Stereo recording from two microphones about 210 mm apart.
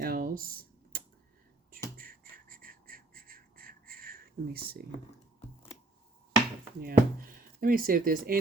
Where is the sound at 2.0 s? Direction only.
45° right (ahead or behind).